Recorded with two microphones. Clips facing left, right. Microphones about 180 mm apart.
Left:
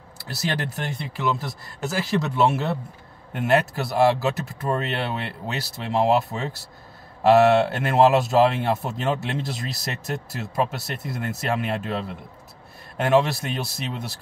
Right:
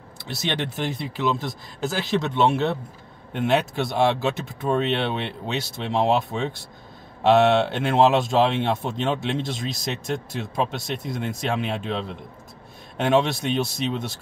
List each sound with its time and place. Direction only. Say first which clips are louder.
0.2 s speech: even; 5° left (ahead or behind)